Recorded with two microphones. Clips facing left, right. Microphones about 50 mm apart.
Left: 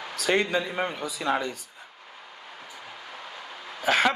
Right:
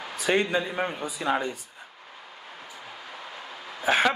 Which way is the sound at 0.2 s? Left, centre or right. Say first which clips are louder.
Even; left.